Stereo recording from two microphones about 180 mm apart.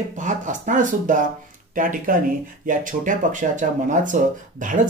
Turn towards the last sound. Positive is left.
turn(degrees=-45)  # may be behind; listen again after turning